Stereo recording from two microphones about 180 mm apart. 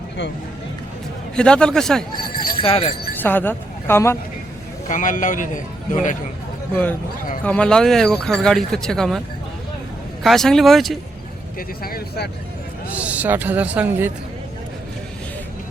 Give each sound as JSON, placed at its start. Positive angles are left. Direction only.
{"t": 1.4, "sound": "speech", "side_deg": 5}
{"t": 2.6, "sound": "speech", "side_deg": 30}
{"t": 3.2, "sound": "speech", "side_deg": 10}
{"t": 4.9, "sound": "a man's voice", "side_deg": 45}
{"t": 7.4, "sound": "speech", "side_deg": 5}
{"t": 10.2, "sound": "speech", "side_deg": 0}
{"t": 11.8, "sound": "speech", "side_deg": 55}
{"t": 12.9, "sound": "speech", "side_deg": -10}